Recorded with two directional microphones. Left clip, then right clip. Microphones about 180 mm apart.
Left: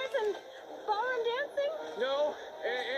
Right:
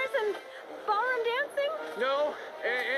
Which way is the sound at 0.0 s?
20° right (ahead or behind).